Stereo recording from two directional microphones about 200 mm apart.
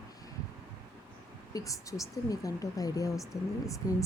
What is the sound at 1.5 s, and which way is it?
Speech, 15° left (ahead or behind).